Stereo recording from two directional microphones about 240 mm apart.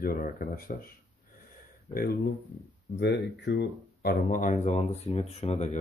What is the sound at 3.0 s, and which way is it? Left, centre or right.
Speech, left.